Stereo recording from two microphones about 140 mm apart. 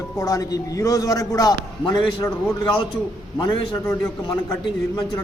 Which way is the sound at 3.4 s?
30° left (ahead or behind).